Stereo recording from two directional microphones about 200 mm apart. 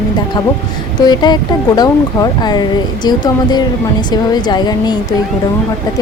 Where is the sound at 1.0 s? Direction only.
20° left (ahead or behind).